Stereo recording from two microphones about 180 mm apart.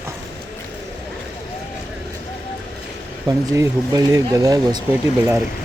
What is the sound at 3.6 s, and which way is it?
Speech, 20° right (ahead or behind).